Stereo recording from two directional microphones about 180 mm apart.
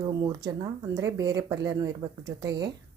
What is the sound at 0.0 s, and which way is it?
Speech, 20° right (ahead or behind).